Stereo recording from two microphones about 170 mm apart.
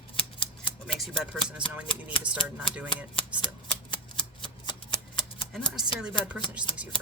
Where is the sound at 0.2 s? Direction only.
30° left (ahead or behind).